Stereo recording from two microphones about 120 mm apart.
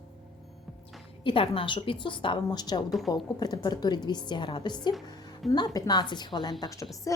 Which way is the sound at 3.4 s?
35° left (ahead or behind).